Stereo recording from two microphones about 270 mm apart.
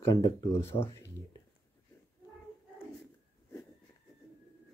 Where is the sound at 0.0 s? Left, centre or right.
Centre.